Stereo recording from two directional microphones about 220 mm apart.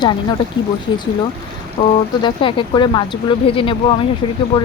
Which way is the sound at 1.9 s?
20° left (ahead or behind).